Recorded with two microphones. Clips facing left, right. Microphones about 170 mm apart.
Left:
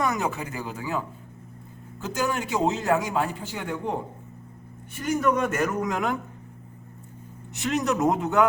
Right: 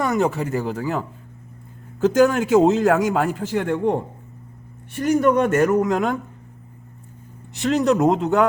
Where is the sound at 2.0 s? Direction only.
50° right (ahead or behind).